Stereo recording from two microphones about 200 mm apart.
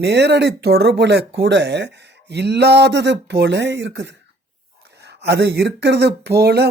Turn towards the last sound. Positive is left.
turn(degrees=-55)  # may be behind; listen again after turning